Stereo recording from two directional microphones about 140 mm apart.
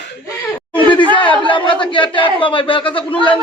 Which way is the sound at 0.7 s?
35° left (ahead or behind).